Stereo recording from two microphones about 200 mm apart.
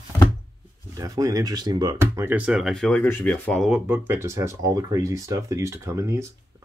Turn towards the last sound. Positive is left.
turn(degrees=-15)  # may be behind; listen again after turning